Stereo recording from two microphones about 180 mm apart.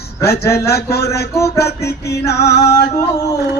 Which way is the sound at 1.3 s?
15° left (ahead or behind).